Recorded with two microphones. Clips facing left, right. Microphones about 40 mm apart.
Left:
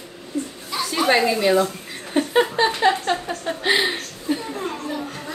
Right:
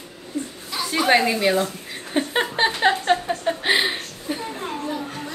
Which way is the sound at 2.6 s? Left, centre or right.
Right.